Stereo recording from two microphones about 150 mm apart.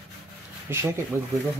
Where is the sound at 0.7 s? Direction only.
15° right (ahead or behind).